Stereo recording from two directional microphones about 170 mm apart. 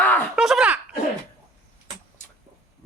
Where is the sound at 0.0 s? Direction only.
10° left (ahead or behind).